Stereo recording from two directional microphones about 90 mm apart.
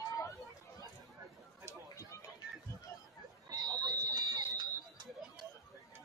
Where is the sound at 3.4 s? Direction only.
45° right (ahead or behind).